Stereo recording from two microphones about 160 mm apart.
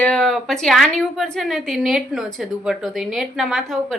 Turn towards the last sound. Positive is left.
turn(degrees=0)  # may be behind; listen again after turning